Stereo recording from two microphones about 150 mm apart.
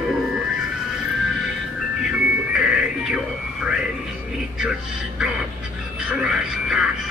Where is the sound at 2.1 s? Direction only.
5° right (ahead or behind).